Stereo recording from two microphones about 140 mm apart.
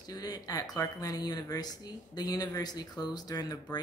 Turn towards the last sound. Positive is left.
turn(degrees=30)  # may be behind; listen again after turning